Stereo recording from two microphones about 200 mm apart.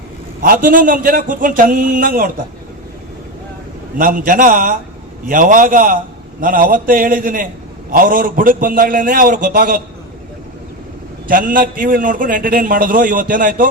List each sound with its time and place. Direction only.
0.4 s a man's voice: 45° right (ahead or behind)
3.9 s a man's voice: 45° right (ahead or behind)
11.3 s a man's voice: 45° right (ahead or behind)